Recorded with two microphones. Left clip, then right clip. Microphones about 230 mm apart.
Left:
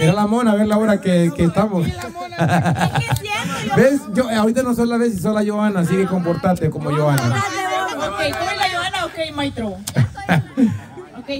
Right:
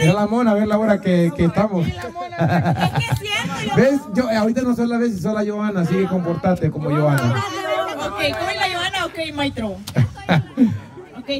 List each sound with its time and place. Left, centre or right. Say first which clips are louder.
0.0 s a man's voice: left 1 dB; centre
8.5 s a sound: left 1 dB; centre
9.9 s speech: left 1 dB; centre